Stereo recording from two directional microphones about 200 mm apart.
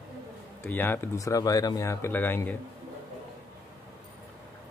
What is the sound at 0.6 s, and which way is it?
Speech, 10° left (ahead or behind).